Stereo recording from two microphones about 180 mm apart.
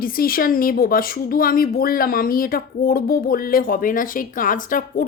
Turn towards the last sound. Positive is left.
turn(degrees=50)  # may be behind; listen again after turning